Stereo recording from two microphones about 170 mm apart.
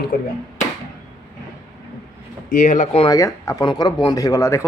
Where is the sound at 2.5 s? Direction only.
50° left (ahead or behind).